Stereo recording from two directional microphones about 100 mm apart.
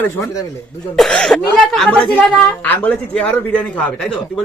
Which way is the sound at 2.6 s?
15° left (ahead or behind).